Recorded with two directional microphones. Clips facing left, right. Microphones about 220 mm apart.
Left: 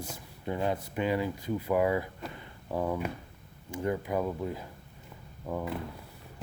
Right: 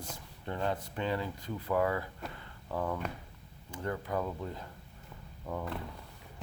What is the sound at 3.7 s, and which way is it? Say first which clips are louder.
Speech: left 5 dB; 10° left (ahead or behind).